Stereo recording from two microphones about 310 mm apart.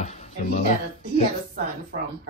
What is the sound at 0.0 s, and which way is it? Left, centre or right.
Music, left.